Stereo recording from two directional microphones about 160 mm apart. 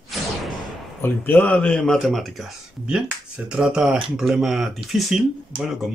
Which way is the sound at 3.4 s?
5° right (ahead or behind).